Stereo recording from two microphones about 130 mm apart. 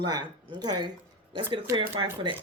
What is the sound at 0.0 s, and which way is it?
Speech, 35° right (ahead or behind).